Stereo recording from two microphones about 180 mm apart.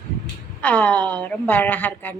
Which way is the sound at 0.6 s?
10° left (ahead or behind).